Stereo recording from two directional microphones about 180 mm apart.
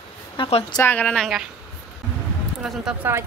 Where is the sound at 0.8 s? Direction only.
10° left (ahead or behind).